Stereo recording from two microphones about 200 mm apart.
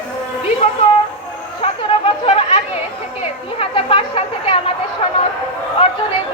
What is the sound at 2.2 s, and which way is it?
Chatter, 30° left (ahead or behind).